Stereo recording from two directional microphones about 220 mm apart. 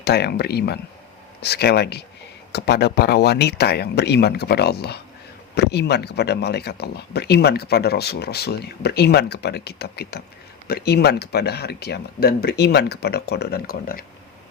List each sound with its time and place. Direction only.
0.0 s speech: 50° left (ahead or behind)